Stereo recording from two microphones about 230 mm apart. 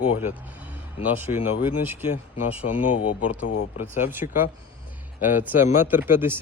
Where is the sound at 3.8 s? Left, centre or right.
Centre.